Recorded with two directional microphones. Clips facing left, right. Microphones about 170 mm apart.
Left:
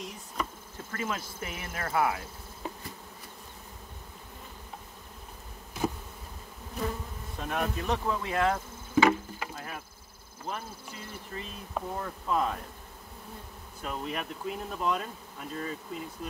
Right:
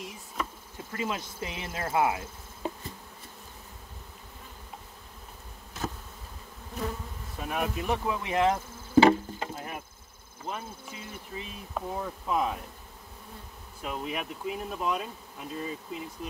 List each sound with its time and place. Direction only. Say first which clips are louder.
0.9 s insect: right 2 dB; 15° right (ahead or behind)
7.3 s speech: even; 5° right (ahead or behind)
8.9 s rowboat: right 4 dB; 30° right (ahead or behind)
10.4 s speech: right 1 dB; 5° right (ahead or behind)
13.8 s speech: right 1 dB; 5° right (ahead or behind)